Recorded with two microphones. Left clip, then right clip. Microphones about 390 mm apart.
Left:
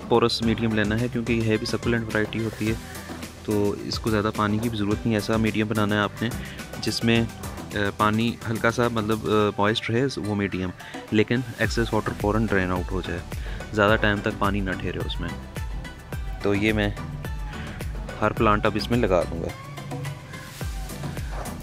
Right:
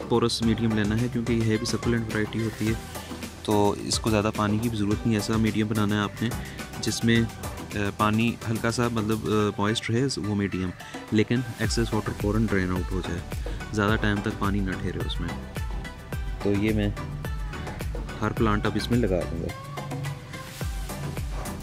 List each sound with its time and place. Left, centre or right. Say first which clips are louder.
0.1 s speech: left 4 dB; centre
16.5 s speech: left 5 dB; centre
18.2 s speech: left 5 dB; centre
18.9 s speech: left 5 dB; left